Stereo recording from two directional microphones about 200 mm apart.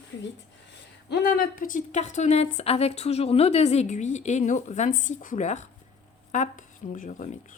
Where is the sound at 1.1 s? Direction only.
50° left (ahead or behind).